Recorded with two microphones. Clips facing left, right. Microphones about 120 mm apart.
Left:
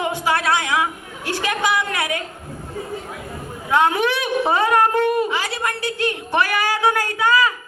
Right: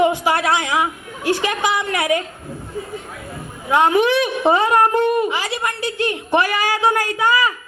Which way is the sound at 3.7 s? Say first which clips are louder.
Right 3 dB; 20° right (ahead or behind).